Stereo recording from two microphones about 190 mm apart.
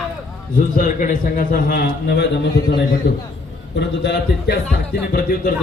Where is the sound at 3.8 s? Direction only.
65° left (ahead or behind).